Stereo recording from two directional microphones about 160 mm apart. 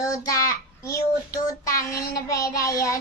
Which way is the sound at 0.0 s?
20° left (ahead or behind).